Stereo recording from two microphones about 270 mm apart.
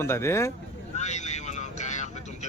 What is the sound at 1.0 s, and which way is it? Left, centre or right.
Vehicle, left.